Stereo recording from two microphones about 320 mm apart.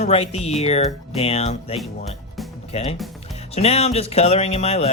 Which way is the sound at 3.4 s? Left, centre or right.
Centre.